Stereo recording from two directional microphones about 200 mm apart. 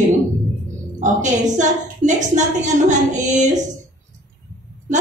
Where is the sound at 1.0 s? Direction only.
40° right (ahead or behind).